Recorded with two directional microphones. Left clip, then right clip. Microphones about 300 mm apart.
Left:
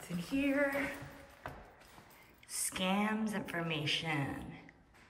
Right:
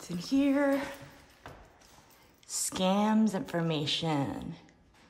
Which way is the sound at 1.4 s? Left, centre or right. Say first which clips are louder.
Left 2 dB; centre.